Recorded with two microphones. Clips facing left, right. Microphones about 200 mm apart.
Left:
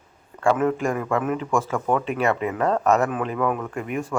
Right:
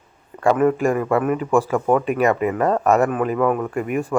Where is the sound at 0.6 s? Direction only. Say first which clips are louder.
Right 5 dB; 10° right (ahead or behind).